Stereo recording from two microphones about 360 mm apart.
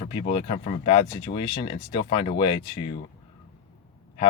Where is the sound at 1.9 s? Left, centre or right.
Centre.